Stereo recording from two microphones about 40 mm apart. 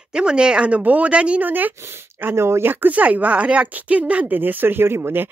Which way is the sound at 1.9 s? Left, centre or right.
Right.